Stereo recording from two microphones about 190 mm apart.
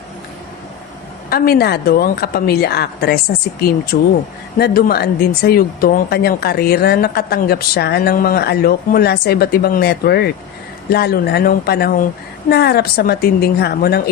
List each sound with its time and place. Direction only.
1.3 s speech: 55° left (ahead or behind)
3.9 s speech: 40° left (ahead or behind)
4.5 s speech: 55° left (ahead or behind)